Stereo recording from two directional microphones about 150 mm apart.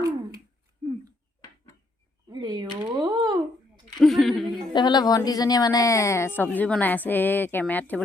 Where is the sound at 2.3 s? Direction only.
30° right (ahead or behind).